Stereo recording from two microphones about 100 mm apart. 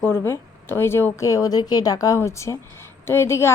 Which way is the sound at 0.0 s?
25° left (ahead or behind).